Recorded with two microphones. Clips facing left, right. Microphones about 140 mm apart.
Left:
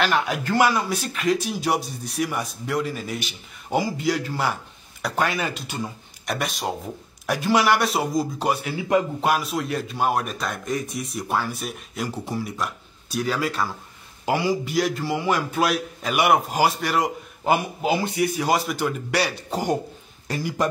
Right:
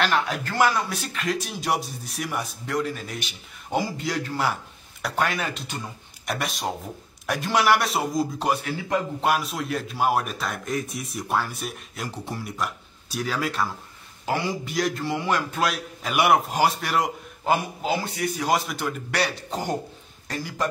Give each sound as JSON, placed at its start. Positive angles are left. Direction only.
{"t": 0.0, "sound": "a man's voice", "side_deg": 0}
{"t": 17.5, "sound": "a man's voice", "side_deg": 15}
{"t": 18.5, "sound": "a man's voice", "side_deg": 0}